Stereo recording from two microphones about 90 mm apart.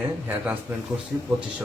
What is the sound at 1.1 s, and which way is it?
Speech, 25° right (ahead or behind).